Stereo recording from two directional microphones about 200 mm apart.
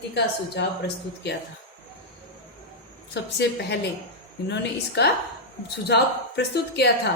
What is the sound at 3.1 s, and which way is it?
A woman's voice, 60° left (ahead or behind).